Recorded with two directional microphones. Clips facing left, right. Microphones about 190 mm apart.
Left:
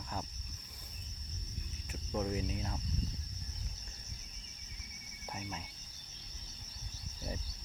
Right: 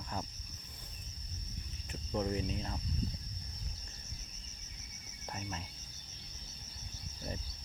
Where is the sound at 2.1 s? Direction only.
Centre (ahead or behind).